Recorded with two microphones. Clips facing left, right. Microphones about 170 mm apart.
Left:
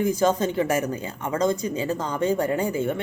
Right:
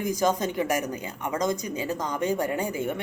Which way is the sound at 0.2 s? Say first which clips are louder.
Left 3 dB; 15° right (ahead or behind).